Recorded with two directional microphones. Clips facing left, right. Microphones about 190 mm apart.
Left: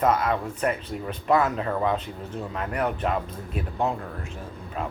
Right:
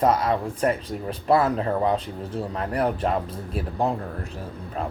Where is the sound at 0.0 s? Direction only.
35° right (ahead or behind).